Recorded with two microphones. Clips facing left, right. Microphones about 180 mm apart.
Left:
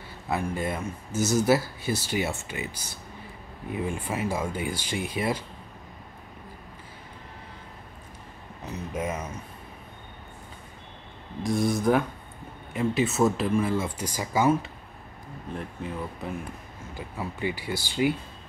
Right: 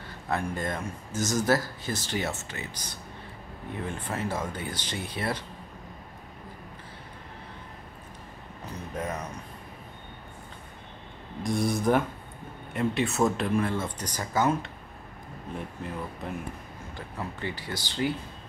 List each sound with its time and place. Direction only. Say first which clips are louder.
0.3 s speech: left 2 dB; 10° left (ahead or behind)
8.9 s speech: left 2 dB; 10° left (ahead or behind)
11.4 s speech: left 2 dB; centre (ahead or behind)